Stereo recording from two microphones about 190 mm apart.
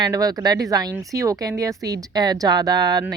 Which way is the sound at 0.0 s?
20° right (ahead or behind).